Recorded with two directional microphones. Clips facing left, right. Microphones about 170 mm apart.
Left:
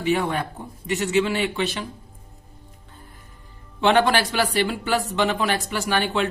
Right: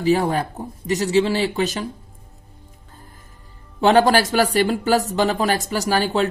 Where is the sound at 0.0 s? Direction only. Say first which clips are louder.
Right 4 dB; 35° right (ahead or behind).